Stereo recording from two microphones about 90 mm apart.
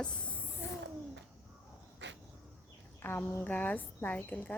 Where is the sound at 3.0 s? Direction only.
25° left (ahead or behind).